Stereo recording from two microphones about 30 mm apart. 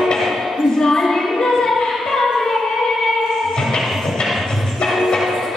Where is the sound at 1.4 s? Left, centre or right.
Centre.